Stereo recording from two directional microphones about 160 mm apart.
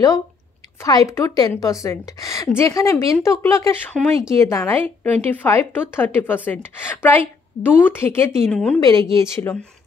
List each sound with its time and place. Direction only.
0.8 s a woman's voice: 20° left (ahead or behind)
3.9 s speech: centre (ahead or behind)
4.4 s a woman's voice: 15° left (ahead or behind)